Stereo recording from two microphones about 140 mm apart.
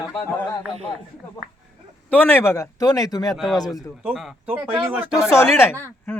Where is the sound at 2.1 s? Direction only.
15° left (ahead or behind).